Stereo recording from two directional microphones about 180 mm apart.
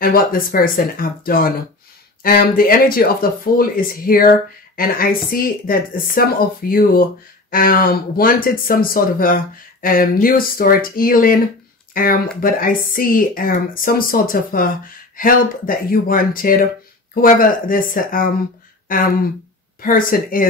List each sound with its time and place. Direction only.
0.0 s speech: 55° left (ahead or behind)